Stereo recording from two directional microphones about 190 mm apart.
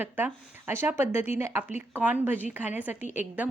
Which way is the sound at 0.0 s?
10° right (ahead or behind).